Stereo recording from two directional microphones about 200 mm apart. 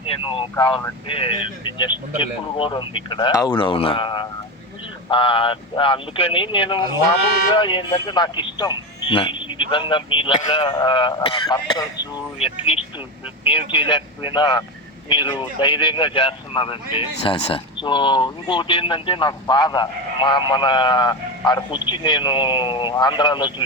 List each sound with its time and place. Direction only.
0.0 s speech: 25° left (ahead or behind)